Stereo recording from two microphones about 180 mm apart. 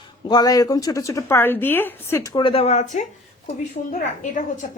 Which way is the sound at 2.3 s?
30° left (ahead or behind).